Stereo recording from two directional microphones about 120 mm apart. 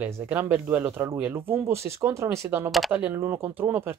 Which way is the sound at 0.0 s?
15° right (ahead or behind).